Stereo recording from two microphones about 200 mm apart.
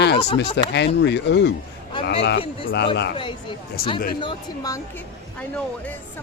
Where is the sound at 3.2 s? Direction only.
25° left (ahead or behind).